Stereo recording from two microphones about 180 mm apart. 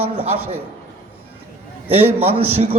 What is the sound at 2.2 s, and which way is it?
Speech, 35° right (ahead or behind).